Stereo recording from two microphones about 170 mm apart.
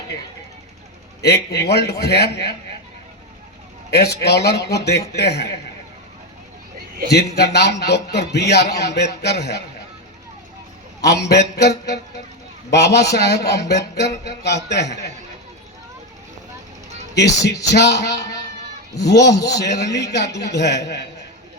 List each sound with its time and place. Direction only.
1.2 s a man's voice: 75° left (ahead or behind)
3.9 s a man's voice: 70° left (ahead or behind)
7.3 s a man's voice: 75° left (ahead or behind)
11.0 s a man's voice: 75° left (ahead or behind)
17.5 s speech: 20° left (ahead or behind)
17.7 s a man's voice: 80° left
19.3 s speech: 20° left (ahead or behind)
19.5 s a man's voice: 80° left